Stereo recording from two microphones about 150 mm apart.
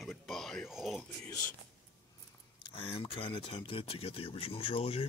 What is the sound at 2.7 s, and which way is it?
Speech, 40° left (ahead or behind).